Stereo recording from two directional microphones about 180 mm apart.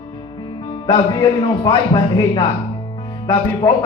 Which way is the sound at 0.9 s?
25° left (ahead or behind).